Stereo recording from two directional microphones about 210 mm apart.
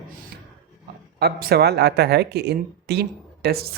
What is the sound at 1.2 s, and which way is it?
Speech, 50° right (ahead or behind).